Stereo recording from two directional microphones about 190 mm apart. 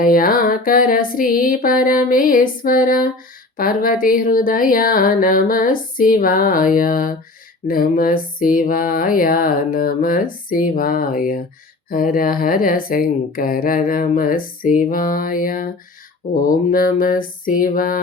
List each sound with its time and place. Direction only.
0.0 s speech: 50° left (ahead or behind)